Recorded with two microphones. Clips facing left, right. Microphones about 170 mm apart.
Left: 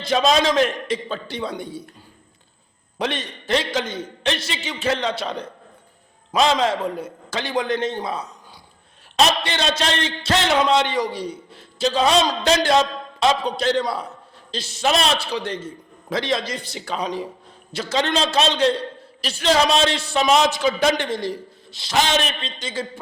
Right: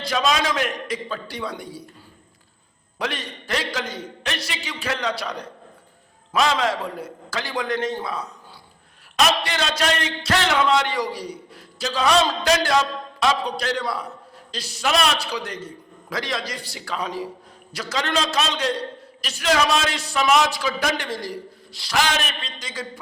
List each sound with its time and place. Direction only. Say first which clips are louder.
0.0 s a man's voice: left 4 dB; 25° left (ahead or behind)
3.0 s a man's voice: left 3 dB; 25° left (ahead or behind)